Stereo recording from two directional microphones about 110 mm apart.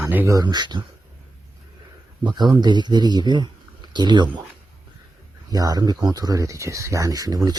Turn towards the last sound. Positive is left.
turn(degrees=-35)  # may be behind; listen again after turning